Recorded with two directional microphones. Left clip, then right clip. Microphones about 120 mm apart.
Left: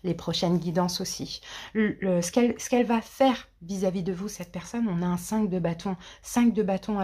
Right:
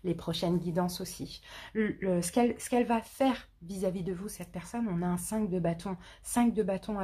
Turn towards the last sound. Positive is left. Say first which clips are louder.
# left 5 dB
turn(degrees=20)  # may be behind; listen again after turning